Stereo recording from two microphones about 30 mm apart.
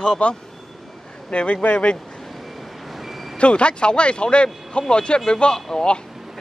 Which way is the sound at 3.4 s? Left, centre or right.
Left.